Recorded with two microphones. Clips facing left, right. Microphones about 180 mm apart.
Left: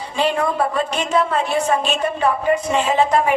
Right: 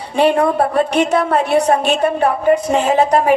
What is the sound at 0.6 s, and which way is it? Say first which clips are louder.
A woman's voice: right 6 dB; 65° right (ahead or behind).